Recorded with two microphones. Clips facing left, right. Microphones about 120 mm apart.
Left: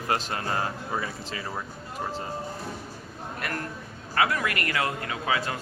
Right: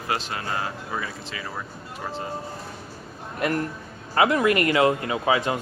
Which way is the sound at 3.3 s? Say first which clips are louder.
Right 9 dB; 20° right (ahead or behind).